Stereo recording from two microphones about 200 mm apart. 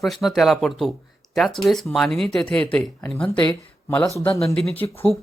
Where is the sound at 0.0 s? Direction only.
Centre (ahead or behind).